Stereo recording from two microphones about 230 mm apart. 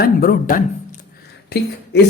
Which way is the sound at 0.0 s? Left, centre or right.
Left.